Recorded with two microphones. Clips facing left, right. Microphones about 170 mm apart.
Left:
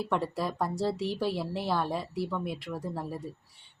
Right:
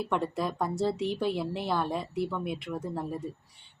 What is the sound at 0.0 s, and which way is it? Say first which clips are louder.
A woman's voice: right 1 dB; centre (ahead or behind).